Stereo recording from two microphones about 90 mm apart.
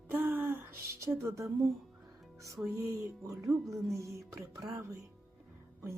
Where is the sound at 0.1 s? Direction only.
20° right (ahead or behind).